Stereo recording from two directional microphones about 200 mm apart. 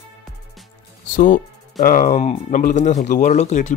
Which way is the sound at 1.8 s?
40° left (ahead or behind).